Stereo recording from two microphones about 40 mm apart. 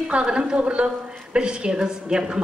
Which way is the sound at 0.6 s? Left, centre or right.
Right.